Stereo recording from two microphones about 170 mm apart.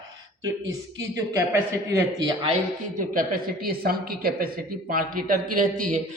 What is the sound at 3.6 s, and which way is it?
A man's voice, 60° right (ahead or behind).